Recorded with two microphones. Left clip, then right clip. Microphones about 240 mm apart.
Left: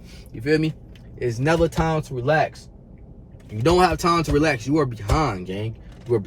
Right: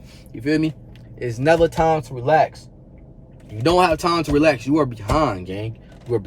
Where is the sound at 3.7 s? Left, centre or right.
Centre.